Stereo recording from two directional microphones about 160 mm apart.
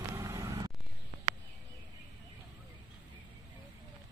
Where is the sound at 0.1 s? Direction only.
20° right (ahead or behind).